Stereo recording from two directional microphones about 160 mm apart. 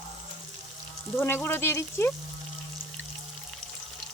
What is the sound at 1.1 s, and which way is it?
Speech, 15° left (ahead or behind).